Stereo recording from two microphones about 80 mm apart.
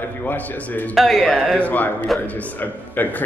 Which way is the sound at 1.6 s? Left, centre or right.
Left.